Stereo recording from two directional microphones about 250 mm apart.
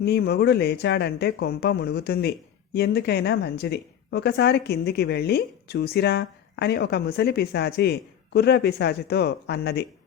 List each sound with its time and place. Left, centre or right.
0.0 s speech: left